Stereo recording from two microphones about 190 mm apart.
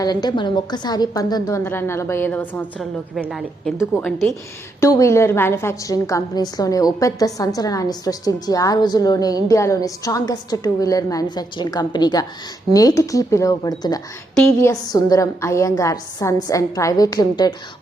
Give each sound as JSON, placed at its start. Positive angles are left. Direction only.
{"t": 0.0, "sound": "a woman's voice", "side_deg": 20}
{"t": 4.8, "sound": "a woman's voice", "side_deg": 15}